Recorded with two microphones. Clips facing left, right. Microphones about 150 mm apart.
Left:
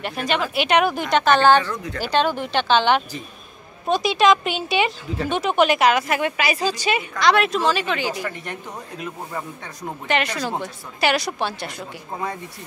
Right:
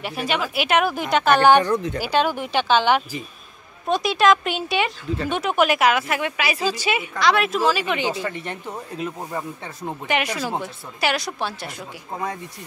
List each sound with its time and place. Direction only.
0.0 s a woman's voice: 5° right (ahead or behind)
8.1 s speech: 30° right (ahead or behind)
9.8 s a woman's voice: 10° right (ahead or behind)